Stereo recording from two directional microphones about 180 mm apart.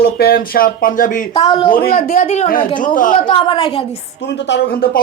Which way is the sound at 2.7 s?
50° left (ahead or behind).